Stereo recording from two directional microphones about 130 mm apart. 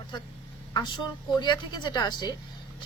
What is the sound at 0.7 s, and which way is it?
Speech, 35° left (ahead or behind).